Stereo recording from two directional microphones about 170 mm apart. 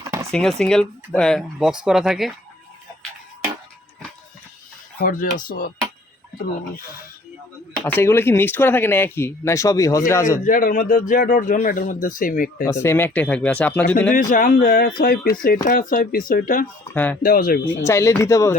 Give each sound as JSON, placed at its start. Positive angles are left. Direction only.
{"t": 0.3, "sound": "speech", "side_deg": 0}
{"t": 4.9, "sound": "speech", "side_deg": 55}
{"t": 7.9, "sound": "speech", "side_deg": 15}
{"t": 10.4, "sound": "speech", "side_deg": 50}
{"t": 12.6, "sound": "speech", "side_deg": 15}
{"t": 14.1, "sound": "speech", "side_deg": 50}
{"t": 16.9, "sound": "speech", "side_deg": 10}
{"t": 17.2, "sound": "speech", "side_deg": 60}
{"t": 17.8, "sound": "speech", "side_deg": 15}